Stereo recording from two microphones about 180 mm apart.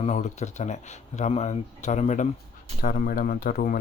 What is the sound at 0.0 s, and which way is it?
Speech, 40° left (ahead or behind).